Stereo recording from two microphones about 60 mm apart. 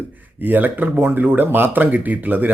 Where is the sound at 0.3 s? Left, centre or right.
Right.